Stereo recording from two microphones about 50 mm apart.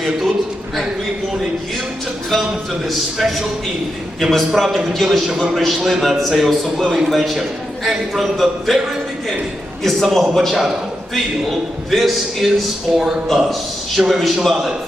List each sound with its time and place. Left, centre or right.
3.2 s a man's voice: centre
9.8 s a man's voice: centre
10.6 s a sound: centre
11.9 s a man's voice: centre
12.9 s speech: centre
13.2 s a man's voice: centre